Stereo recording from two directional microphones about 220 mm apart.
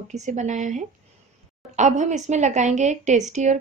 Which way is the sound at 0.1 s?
30° right (ahead or behind).